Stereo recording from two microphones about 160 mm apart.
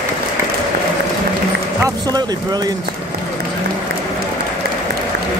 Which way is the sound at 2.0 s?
25° right (ahead or behind).